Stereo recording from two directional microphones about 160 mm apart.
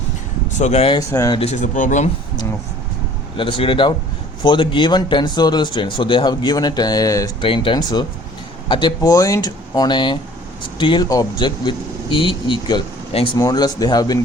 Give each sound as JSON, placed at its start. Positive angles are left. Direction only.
{"t": 0.6, "sound": "speech", "side_deg": 40}
{"t": 0.9, "sound": "speech", "side_deg": 20}
{"t": 1.4, "sound": "speech", "side_deg": 45}
{"t": 3.3, "sound": "speech", "side_deg": 35}
{"t": 7.4, "sound": "speech", "side_deg": 35}